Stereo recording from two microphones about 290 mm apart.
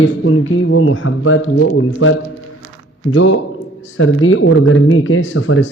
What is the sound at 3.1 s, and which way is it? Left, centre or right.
Speech, left.